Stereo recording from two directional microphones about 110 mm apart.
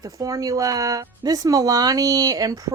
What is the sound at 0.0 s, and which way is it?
A woman's voice, 30° right (ahead or behind).